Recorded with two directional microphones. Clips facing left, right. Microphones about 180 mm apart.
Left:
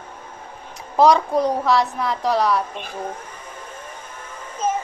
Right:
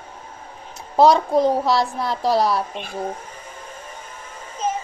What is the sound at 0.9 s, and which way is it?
A woman's voice, 30° right (ahead or behind).